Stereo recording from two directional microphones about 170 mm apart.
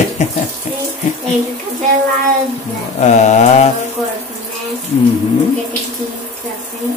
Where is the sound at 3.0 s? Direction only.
45° left (ahead or behind).